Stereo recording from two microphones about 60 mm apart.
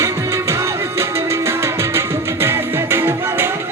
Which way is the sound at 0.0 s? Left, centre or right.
Right.